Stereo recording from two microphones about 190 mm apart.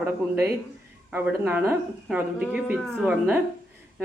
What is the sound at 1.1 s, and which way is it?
A woman's voice, 10° right (ahead or behind).